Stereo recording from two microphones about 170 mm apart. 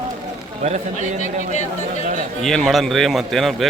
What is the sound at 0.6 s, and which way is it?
Speech, 45° right (ahead or behind).